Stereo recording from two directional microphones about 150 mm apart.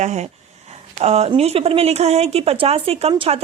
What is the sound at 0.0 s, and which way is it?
Speech, 50° right (ahead or behind).